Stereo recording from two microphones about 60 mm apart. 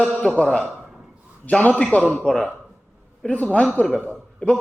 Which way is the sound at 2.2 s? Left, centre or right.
Centre.